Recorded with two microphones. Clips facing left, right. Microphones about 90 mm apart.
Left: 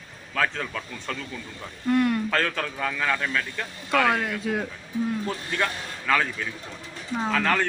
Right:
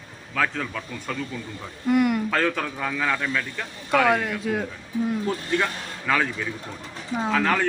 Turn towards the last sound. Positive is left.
turn(degrees=-10)  # may be behind; listen again after turning